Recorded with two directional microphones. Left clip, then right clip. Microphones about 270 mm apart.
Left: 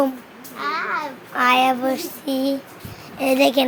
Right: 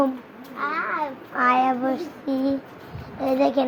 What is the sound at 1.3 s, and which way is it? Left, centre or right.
Speech, left.